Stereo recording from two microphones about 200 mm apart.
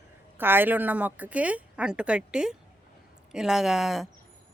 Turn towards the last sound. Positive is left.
turn(degrees=0)  # may be behind; listen again after turning